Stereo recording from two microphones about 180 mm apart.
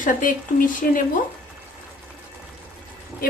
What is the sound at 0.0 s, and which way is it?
A woman's voice, 50° left (ahead or behind).